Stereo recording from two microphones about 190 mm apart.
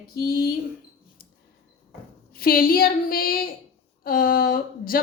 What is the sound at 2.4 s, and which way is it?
Speech, 50° left (ahead or behind).